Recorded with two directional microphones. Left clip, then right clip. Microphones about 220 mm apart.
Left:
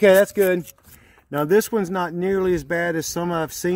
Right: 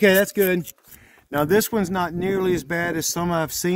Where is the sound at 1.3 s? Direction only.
70° right (ahead or behind).